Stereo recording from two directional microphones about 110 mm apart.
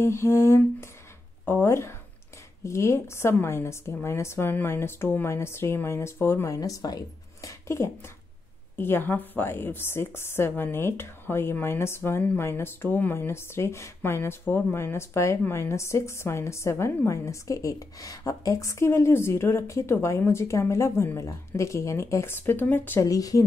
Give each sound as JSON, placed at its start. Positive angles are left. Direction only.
{"t": 0.0, "sound": "a woman's voice", "side_deg": 25}
{"t": 7.4, "sound": "a sound", "side_deg": 25}
{"t": 8.7, "sound": "a woman's voice", "side_deg": 20}
{"t": 23.0, "sound": "speech", "side_deg": 30}